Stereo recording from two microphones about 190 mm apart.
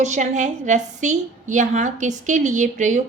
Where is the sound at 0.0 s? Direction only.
40° right (ahead or behind).